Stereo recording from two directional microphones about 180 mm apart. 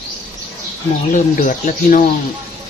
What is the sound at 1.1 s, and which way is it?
Speech, 50° left (ahead or behind).